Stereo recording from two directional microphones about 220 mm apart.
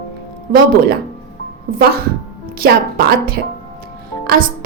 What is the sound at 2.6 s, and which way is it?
Speech, 40° right (ahead or behind).